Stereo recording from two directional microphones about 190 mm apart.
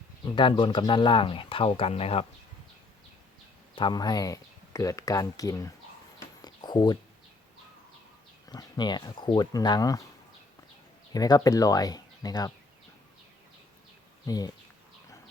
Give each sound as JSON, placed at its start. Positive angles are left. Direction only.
{"t": 0.3, "sound": "speech", "side_deg": 25}
{"t": 3.8, "sound": "speech", "side_deg": 25}
{"t": 6.4, "sound": "a sound", "side_deg": 20}
{"t": 8.4, "sound": "speech", "side_deg": 20}
{"t": 11.1, "sound": "speech", "side_deg": 20}
{"t": 14.3, "sound": "speech", "side_deg": 20}